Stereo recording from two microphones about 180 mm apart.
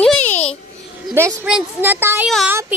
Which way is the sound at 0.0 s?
5° left (ahead or behind).